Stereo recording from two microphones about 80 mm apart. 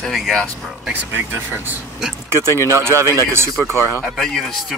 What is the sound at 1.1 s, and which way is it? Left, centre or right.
Speech, right.